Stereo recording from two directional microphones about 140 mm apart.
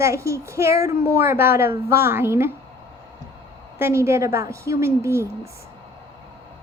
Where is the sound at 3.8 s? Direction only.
20° right (ahead or behind).